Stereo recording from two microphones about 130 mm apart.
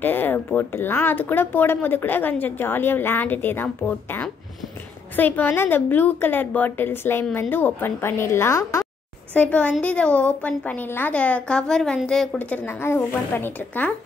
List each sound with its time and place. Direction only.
0.0 s a woman's voice: 15° left (ahead or behind)